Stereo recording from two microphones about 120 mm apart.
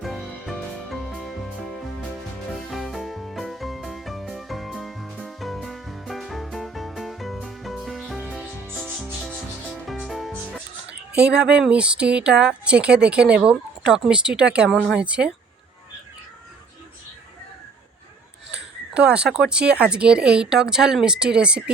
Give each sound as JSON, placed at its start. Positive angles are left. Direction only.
{"t": 0.0, "sound": "music", "side_deg": 0}
{"t": 2.5, "sound": "music", "side_deg": 0}
{"t": 8.7, "sound": "rub", "side_deg": 0}
{"t": 9.8, "sound": "speech", "side_deg": 0}
{"t": 18.5, "sound": "speech", "side_deg": -10}